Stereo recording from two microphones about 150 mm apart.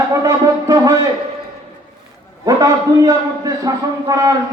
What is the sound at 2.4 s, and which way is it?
A man's voice, 20° right (ahead or behind).